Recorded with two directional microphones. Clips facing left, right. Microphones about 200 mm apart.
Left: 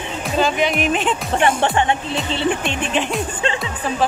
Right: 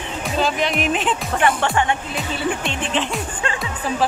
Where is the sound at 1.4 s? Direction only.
20° left (ahead or behind).